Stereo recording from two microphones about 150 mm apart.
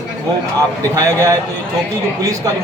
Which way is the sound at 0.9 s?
20° right (ahead or behind).